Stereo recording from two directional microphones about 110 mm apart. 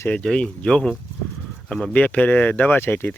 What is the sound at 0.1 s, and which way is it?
Speech, 10° left (ahead or behind).